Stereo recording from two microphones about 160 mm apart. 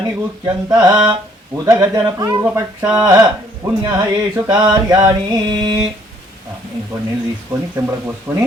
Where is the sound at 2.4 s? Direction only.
10° right (ahead or behind).